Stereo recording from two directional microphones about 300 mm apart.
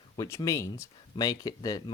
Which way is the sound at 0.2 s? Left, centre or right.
Centre.